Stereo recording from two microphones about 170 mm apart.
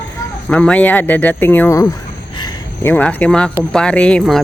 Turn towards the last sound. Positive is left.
turn(degrees=5)  # may be behind; listen again after turning